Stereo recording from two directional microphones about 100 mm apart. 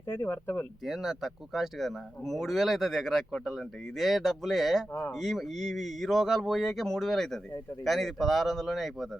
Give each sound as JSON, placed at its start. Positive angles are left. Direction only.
{"t": 0.1, "sound": "speech", "side_deg": 20}
{"t": 0.9, "sound": "speech", "side_deg": 0}